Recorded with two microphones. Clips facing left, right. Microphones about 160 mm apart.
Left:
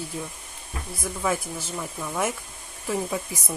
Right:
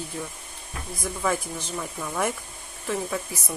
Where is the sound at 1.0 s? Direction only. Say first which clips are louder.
Even; 5° left (ahead or behind).